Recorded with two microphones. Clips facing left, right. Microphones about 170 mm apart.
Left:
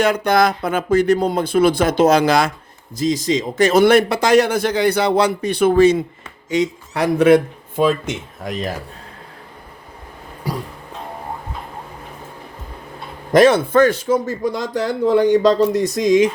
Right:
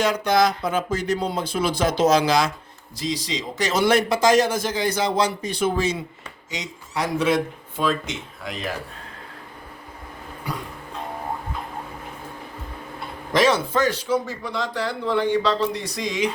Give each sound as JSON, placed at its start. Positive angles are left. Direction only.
{"t": 0.0, "sound": "a man's voice", "side_deg": 55}
{"t": 13.3, "sound": "a man's voice", "side_deg": 55}